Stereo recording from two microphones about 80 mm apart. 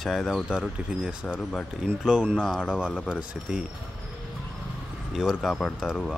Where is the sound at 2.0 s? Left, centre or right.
Centre.